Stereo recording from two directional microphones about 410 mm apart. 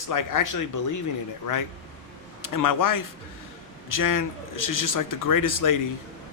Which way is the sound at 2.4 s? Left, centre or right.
Left.